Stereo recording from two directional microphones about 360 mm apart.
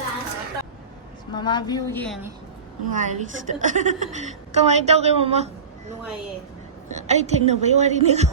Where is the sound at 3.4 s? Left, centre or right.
Right.